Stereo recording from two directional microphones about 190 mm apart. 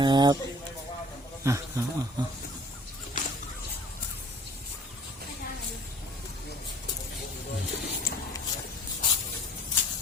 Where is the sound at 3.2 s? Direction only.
45° left (ahead or behind).